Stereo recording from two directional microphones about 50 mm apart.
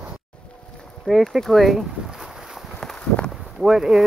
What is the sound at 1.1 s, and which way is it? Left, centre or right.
Speech, centre.